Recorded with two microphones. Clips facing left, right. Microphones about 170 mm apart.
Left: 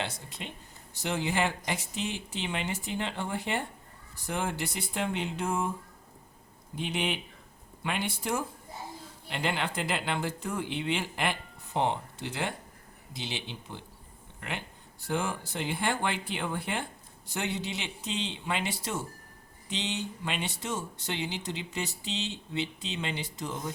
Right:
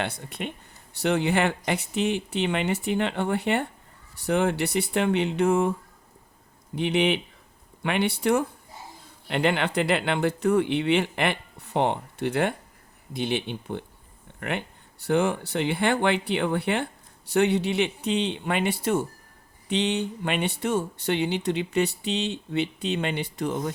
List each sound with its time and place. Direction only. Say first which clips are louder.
0.0 s speech: right 6 dB; 60° right (ahead or behind)
6.7 s speech: right 9 dB; 65° right (ahead or behind)